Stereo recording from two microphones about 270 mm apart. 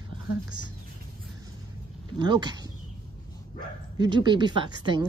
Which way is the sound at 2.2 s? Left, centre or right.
Centre.